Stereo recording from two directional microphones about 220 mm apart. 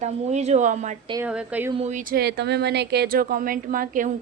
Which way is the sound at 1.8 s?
30° right (ahead or behind).